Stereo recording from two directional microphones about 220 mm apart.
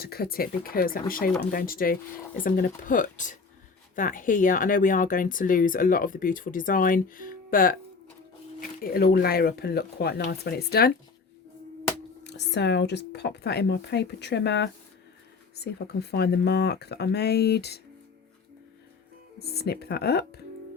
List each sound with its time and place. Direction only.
0.0 s speech: 45° left (ahead or behind)
8.8 s speech: 40° left (ahead or behind)
12.2 s speech: 50° left (ahead or behind)
19.4 s speech: 45° left (ahead or behind)